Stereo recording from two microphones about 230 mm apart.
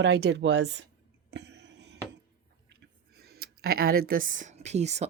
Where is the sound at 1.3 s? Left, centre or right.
Right.